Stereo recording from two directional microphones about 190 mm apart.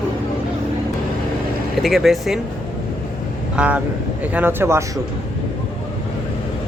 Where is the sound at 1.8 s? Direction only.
Centre (ahead or behind).